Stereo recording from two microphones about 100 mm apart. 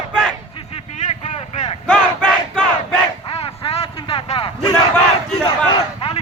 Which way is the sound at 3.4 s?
70° left (ahead or behind).